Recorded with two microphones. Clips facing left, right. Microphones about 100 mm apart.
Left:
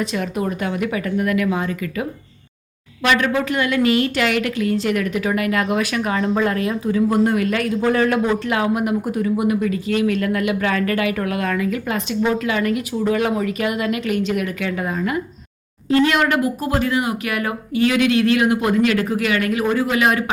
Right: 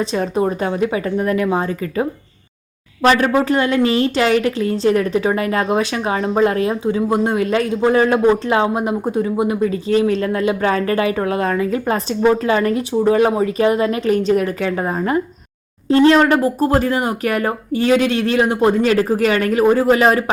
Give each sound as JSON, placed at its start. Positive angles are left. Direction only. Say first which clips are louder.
{"t": 0.0, "sound": "a woman's voice", "louder": "right 4 dB", "side_deg": -30}